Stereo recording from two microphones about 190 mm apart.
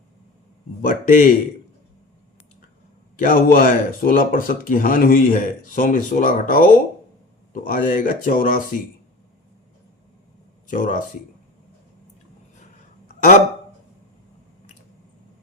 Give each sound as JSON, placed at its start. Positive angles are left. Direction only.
{"t": 0.9, "sound": "speech", "side_deg": 45}
{"t": 3.2, "sound": "speech", "side_deg": 45}
{"t": 10.7, "sound": "speech", "side_deg": 45}